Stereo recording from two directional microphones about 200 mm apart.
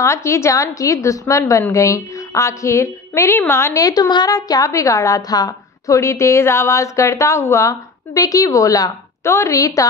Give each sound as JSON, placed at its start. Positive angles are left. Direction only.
{"t": 0.0, "sound": "a woman's voice", "side_deg": 15}